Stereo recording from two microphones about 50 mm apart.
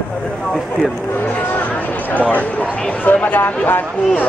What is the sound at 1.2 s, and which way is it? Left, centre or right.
Speech, left.